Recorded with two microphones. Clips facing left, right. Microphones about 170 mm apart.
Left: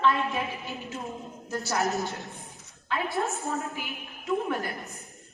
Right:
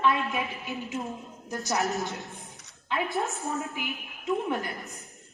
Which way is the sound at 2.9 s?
20° right (ahead or behind).